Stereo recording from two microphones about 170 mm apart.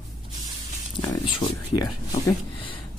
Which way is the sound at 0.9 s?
25° left (ahead or behind).